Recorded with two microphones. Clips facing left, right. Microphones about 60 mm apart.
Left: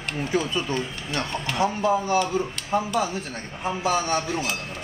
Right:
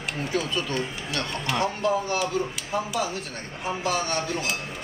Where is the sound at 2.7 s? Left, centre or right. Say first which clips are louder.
Left 4 dB; left.